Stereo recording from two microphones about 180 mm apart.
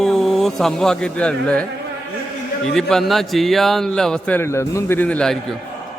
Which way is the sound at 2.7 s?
Centre (ahead or behind).